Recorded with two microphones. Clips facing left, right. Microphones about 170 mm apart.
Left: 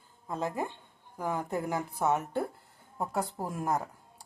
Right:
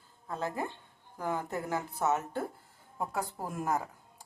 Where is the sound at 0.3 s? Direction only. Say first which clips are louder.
Left 2 dB; 15° left (ahead or behind).